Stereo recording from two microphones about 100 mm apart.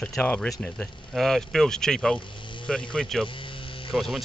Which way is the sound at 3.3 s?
60° left (ahead or behind).